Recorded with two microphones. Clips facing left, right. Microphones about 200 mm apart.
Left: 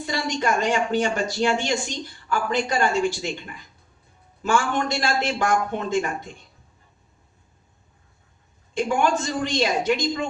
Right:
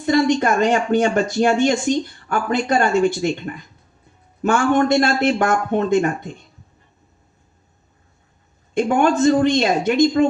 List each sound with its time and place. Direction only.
0.0 s speech: 55° right (ahead or behind)
8.7 s speech: 55° right (ahead or behind)